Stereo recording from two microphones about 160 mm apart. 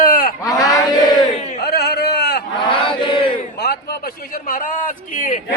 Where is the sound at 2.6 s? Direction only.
30° left (ahead or behind).